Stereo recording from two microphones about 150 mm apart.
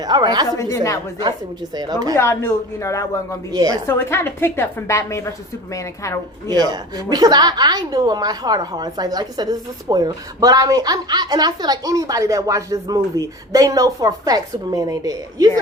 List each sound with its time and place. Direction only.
0.0 s a woman's voice: 25° right (ahead or behind)
0.6 s speech: 20° left (ahead or behind)
1.7 s a woman's voice: 25° right (ahead or behind)
2.1 s speech: 15° left (ahead or behind)
3.5 s a woman's voice: 25° right (ahead or behind)
3.8 s a woman's voice: 15° left (ahead or behind)
6.5 s a woman's voice: 25° right (ahead or behind)